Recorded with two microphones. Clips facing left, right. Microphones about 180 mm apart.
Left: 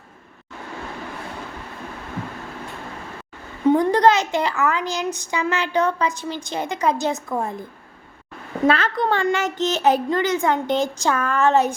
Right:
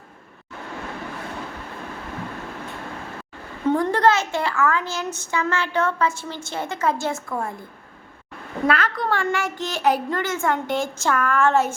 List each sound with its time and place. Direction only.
3.7 s a child's voice: 15° left (ahead or behind)
8.6 s a child's voice: 25° left (ahead or behind)